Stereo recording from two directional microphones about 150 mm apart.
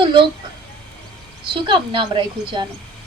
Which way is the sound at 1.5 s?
35° right (ahead or behind).